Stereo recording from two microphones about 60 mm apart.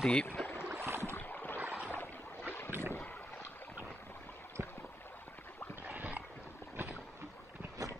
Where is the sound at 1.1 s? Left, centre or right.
Left.